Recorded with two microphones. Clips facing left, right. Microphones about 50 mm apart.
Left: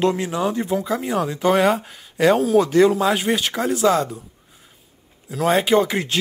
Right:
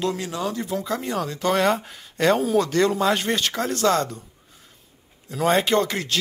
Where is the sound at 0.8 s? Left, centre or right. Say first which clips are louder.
Left 4 dB; centre.